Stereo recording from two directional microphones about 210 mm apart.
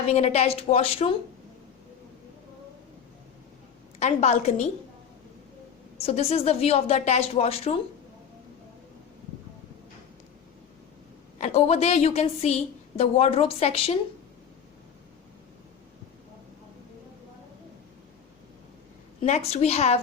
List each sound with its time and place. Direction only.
0.1 s a woman's voice: 30° left (ahead or behind)
4.0 s a woman's voice: 30° left (ahead or behind)
6.0 s a woman's voice: 30° left (ahead or behind)
11.3 s a woman's voice: 30° left (ahead or behind)
19.2 s a woman's voice: 30° left (ahead or behind)